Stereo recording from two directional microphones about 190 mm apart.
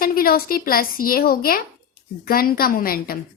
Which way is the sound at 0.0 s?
50° left (ahead or behind).